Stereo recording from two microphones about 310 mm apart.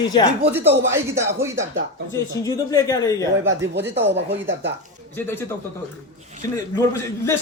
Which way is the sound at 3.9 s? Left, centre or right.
Right.